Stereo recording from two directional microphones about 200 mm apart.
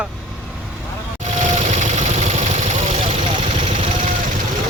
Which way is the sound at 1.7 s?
35° right (ahead or behind).